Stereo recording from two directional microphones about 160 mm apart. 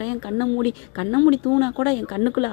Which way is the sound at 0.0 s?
30° left (ahead or behind).